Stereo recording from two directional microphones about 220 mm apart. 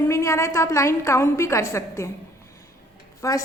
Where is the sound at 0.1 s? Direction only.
15° left (ahead or behind).